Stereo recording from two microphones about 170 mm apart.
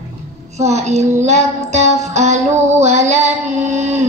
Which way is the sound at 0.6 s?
40° right (ahead or behind).